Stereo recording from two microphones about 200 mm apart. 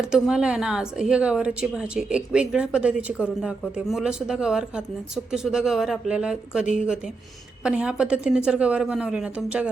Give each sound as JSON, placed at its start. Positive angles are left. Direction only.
{"t": 0.0, "sound": "speech", "side_deg": -5}